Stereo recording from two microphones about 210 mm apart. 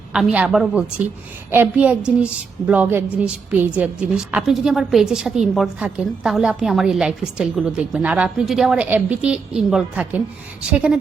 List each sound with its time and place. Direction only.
0.1 s a woman's voice: 5° right (ahead or behind)